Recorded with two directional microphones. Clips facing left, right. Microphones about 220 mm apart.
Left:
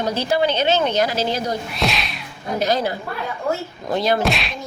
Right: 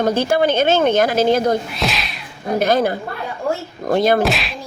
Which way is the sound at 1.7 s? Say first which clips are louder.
Even; centre (ahead or behind).